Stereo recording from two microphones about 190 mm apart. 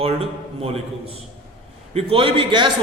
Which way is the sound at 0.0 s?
30° right (ahead or behind).